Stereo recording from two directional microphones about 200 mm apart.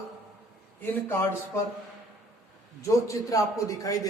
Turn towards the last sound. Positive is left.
turn(degrees=15)  # may be behind; listen again after turning